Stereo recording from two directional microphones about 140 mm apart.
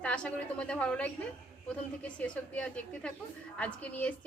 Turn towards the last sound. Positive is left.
turn(degrees=10)  # may be behind; listen again after turning